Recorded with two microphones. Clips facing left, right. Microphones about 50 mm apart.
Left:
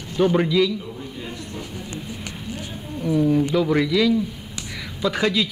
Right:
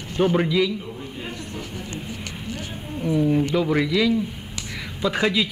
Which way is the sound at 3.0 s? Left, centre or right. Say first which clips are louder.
Left 1 dB; centre.